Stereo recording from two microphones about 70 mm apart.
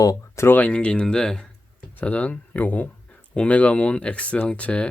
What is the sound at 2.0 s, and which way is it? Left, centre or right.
Speech, left.